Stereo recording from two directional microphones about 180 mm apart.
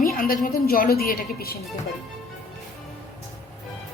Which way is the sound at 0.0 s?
50° left (ahead or behind).